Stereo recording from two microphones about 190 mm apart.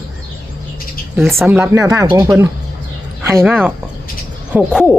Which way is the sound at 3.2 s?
10° right (ahead or behind).